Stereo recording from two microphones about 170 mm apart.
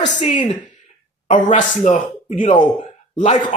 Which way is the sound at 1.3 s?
45° left (ahead or behind).